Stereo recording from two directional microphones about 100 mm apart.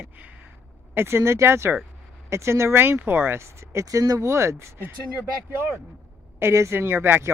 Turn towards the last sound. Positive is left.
turn(degrees=-20)  # may be behind; listen again after turning